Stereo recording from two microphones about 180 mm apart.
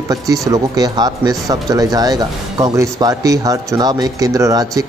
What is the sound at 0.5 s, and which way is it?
Speech, 20° right (ahead or behind).